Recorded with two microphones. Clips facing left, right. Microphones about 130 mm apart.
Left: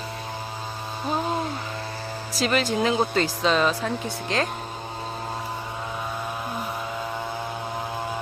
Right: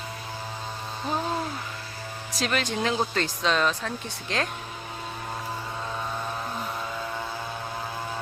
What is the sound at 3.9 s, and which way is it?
Speech, 90° left.